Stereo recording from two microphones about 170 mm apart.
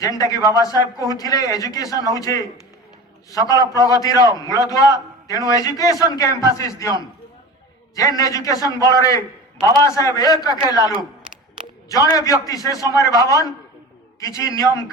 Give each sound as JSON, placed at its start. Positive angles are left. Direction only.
{"t": 0.0, "sound": "a man's voice", "side_deg": 20}
{"t": 3.3, "sound": "a man's voice", "side_deg": 20}
{"t": 7.9, "sound": "a man's voice", "side_deg": 20}
{"t": 11.9, "sound": "a man's voice", "side_deg": 20}